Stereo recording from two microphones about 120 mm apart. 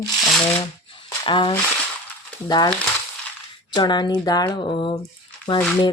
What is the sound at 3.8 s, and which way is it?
A woman's voice, 40° left (ahead or behind).